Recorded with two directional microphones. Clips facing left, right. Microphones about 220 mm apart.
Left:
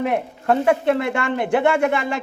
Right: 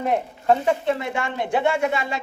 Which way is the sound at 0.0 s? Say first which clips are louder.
Left 1 dB; 65° left (ahead or behind).